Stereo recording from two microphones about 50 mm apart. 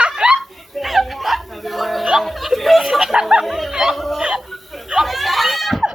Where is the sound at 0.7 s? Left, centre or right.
Centre.